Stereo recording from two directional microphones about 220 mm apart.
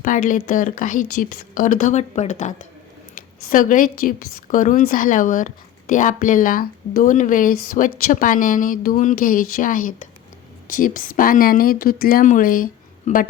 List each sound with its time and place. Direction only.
0.0 s speech: 35° left (ahead or behind)